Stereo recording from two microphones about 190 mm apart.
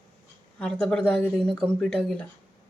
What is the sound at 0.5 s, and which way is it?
Speech, 5° left (ahead or behind).